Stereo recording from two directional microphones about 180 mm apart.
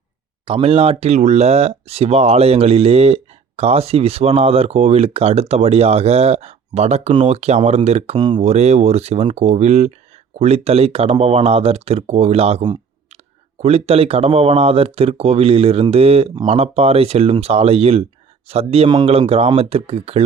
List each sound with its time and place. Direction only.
0.4 s speech: 30° right (ahead or behind)